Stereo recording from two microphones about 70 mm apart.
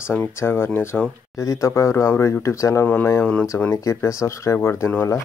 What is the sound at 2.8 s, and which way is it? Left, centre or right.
Speech, left.